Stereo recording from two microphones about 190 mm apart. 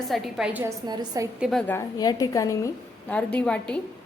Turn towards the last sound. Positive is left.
turn(degrees=5)  # may be behind; listen again after turning